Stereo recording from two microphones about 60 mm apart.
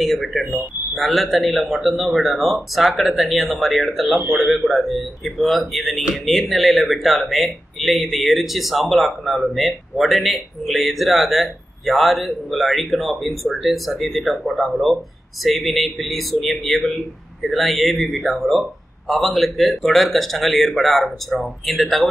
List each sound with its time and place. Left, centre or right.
0.0 s speech: centre